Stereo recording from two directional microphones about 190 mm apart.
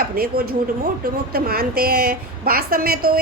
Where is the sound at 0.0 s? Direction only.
50° right (ahead or behind).